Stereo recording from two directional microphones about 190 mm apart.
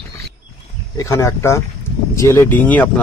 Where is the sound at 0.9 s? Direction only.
15° left (ahead or behind).